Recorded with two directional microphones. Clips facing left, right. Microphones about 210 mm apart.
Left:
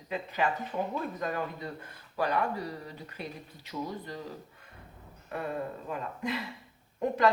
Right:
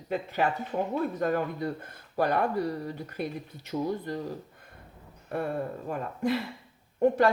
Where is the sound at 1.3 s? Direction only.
50° right (ahead or behind).